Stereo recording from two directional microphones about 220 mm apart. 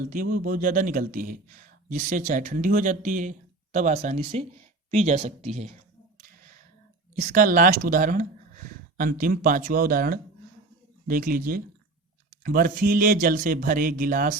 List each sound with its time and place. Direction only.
0.1 s speech: 40° right (ahead or behind)
7.2 s speech: 35° right (ahead or behind)